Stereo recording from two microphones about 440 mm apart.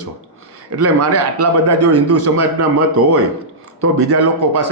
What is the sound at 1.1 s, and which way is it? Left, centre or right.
A man's voice, right.